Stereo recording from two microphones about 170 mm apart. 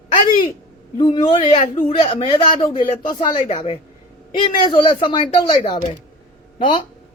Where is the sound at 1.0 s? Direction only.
30° left (ahead or behind).